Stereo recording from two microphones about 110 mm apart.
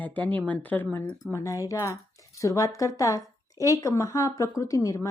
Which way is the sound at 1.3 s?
30° left (ahead or behind).